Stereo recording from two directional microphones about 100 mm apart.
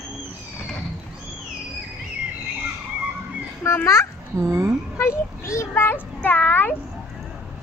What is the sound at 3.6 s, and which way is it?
Children playing, 30° left (ahead or behind).